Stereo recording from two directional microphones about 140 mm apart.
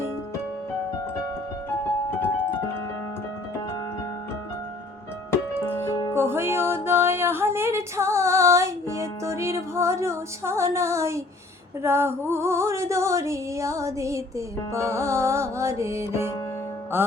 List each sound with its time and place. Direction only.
5.6 s music: 15° left (ahead or behind)
6.1 s music: 15° right (ahead or behind)
6.8 s female singing: 15° right (ahead or behind)
16.9 s music: 15° right (ahead or behind)